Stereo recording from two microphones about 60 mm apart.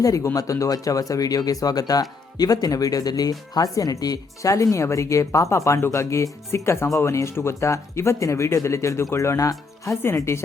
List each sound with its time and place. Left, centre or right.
0.0 s speech: left
10.3 s speech: left